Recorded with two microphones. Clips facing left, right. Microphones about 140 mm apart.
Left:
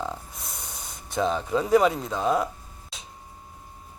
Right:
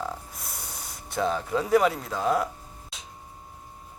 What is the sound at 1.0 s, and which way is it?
Speech, 20° left (ahead or behind).